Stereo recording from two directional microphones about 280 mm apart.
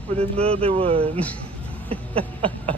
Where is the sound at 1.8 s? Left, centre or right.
Centre.